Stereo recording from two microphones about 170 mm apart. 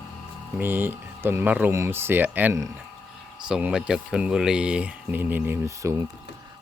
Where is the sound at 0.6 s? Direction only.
10° right (ahead or behind).